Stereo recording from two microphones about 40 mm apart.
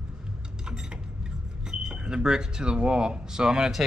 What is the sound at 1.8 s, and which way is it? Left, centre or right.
Speech, centre.